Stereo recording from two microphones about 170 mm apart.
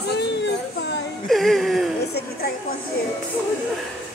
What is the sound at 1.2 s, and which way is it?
Whimper, centre (ahead or behind).